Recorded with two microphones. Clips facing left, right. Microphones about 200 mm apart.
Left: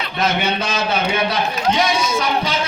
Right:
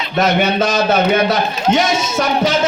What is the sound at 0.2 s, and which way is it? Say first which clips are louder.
A man's voice: right 6 dB; 45° right (ahead or behind).